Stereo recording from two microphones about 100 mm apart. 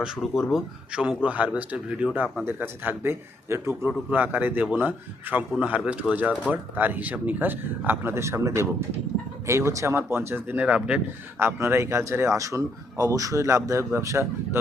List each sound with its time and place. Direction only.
0.0 s speech: 5° right (ahead or behind)
11.3 s a man's voice: 25° right (ahead or behind)